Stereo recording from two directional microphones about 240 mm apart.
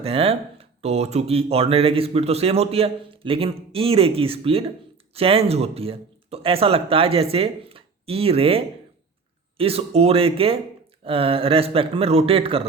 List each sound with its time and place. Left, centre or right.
0.0 s speech: right